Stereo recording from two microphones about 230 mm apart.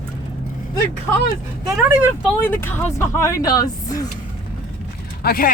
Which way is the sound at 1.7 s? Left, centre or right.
Centre.